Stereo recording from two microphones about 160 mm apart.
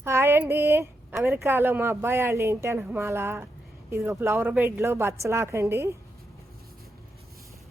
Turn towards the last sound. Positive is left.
turn(degrees=-15)  # may be behind; listen again after turning